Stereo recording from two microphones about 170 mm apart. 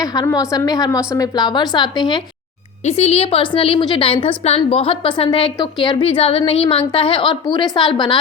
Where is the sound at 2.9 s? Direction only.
35° left (ahead or behind).